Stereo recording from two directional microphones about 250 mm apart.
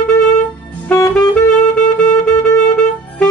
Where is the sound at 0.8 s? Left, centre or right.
Centre.